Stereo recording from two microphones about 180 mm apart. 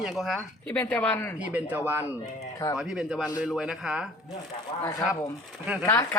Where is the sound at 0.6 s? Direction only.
10° left (ahead or behind).